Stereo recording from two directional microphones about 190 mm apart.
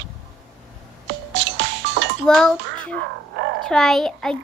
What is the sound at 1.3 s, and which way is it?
Music, 70° right (ahead or behind).